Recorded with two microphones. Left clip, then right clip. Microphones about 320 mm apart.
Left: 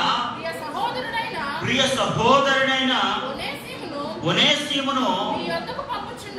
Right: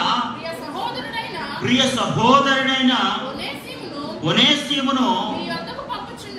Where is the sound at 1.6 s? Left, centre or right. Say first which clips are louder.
Right 2 dB; right.